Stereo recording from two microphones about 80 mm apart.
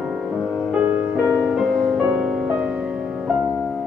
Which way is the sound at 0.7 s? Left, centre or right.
Right.